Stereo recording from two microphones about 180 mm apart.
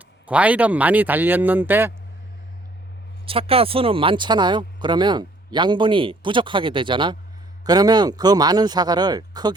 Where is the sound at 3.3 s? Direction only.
30° right (ahead or behind).